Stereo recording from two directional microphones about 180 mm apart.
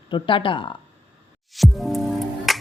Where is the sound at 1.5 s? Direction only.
Centre (ahead or behind).